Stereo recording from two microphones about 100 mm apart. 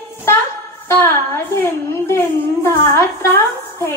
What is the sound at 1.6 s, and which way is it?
A woman's voice, 25° left (ahead or behind).